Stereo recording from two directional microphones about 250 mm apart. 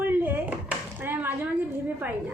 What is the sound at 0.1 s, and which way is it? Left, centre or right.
Dishes, centre.